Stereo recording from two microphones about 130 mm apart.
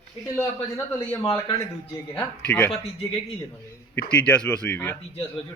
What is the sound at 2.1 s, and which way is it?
Speech, 10° left (ahead or behind).